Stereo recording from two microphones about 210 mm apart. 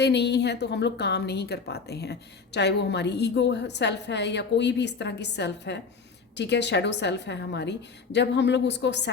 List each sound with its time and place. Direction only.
0.0 s a woman's voice: 55° left (ahead or behind)